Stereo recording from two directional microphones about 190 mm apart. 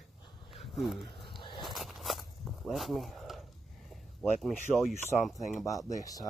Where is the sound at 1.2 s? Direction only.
25° left (ahead or behind).